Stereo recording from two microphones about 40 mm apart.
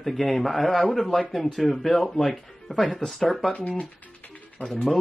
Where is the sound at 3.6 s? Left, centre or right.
Left.